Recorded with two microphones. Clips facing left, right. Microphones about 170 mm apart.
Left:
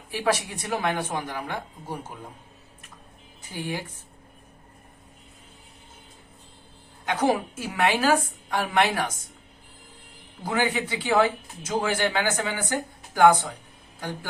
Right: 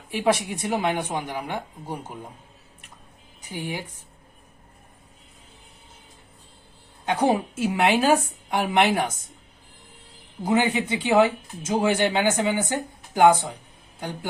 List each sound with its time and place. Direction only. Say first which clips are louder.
0.1 s a woman's voice: right 3 dB; 20° right (ahead or behind)
3.5 s a woman's voice: even; 15° right (ahead or behind)
7.0 s speech: right 2 dB; 30° right (ahead or behind)
10.4 s speech: right 4 dB; 20° right (ahead or behind)